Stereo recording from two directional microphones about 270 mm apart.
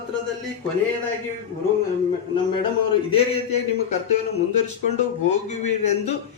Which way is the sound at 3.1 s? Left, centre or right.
Left.